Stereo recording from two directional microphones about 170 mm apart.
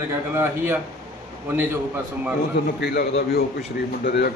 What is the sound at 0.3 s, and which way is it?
A man's voice, 10° right (ahead or behind).